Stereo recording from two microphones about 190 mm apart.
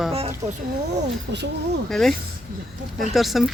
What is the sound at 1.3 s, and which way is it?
Speech, 70° right (ahead or behind).